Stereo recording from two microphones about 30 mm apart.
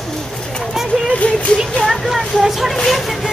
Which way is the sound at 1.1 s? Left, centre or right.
Left.